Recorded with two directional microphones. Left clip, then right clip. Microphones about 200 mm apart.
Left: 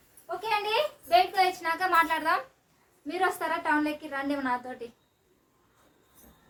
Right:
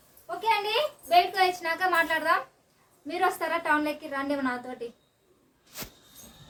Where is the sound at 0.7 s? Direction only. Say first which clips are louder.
Even; 5° right (ahead or behind).